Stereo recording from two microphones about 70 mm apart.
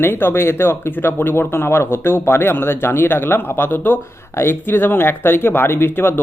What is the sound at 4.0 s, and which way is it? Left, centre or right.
Speech, left.